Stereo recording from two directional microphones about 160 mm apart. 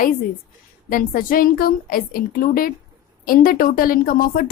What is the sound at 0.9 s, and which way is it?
A woman's voice, 60° left (ahead or behind).